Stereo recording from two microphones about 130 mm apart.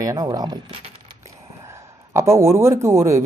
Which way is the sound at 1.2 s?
20° right (ahead or behind).